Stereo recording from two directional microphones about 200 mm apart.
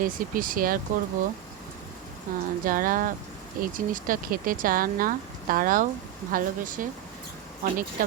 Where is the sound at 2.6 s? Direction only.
45° right (ahead or behind).